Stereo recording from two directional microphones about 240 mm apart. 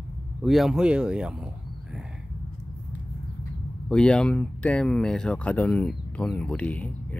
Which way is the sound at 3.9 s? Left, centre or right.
Centre.